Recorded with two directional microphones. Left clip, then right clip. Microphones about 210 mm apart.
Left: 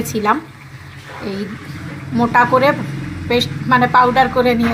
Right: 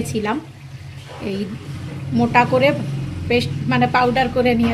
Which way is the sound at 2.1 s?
20° right (ahead or behind).